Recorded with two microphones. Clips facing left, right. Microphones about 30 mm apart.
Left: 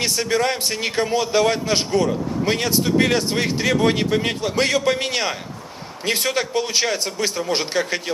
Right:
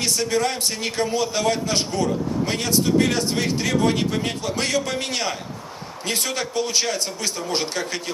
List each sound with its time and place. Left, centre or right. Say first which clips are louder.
0.0 s a man's voice: left 2 dB; left